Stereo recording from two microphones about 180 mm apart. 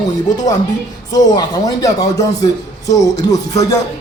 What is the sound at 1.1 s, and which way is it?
Speech, 20° left (ahead or behind).